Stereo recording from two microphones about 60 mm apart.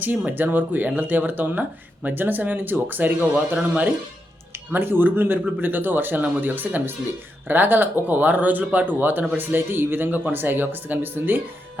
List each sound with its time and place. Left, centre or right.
0.0 s speech: right